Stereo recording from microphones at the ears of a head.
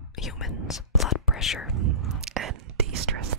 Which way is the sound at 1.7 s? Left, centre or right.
Right.